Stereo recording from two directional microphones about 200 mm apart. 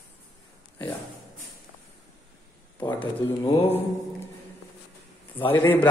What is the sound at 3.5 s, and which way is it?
Speech, 30° left (ahead or behind).